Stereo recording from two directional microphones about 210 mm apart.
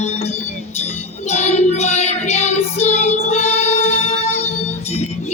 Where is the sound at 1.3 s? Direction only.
30° left (ahead or behind).